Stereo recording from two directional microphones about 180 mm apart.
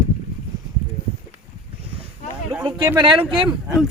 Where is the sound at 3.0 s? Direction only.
30° right (ahead or behind).